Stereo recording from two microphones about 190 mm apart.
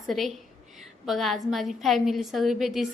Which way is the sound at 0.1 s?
Centre (ahead or behind).